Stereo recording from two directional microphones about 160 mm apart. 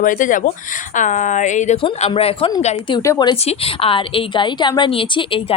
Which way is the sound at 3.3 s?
40° left (ahead or behind).